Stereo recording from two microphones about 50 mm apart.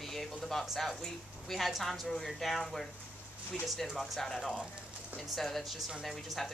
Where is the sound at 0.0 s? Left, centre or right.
Centre.